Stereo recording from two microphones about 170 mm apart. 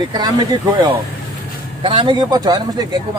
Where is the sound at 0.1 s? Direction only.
25° right (ahead or behind).